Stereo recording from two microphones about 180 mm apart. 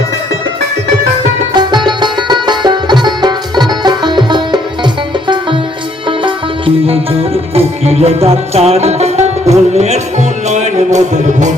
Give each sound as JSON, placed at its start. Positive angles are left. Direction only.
{"t": 1.5, "sound": "music", "side_deg": -25}
{"t": 6.1, "sound": "music", "side_deg": -30}